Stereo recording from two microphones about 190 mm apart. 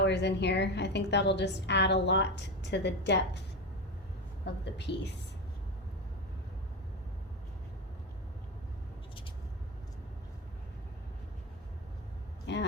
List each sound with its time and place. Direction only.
0.0 s a woman's voice: 65° left (ahead or behind)
4.6 s a woman's voice: 65° left (ahead or behind)
12.5 s a sound: 65° left (ahead or behind)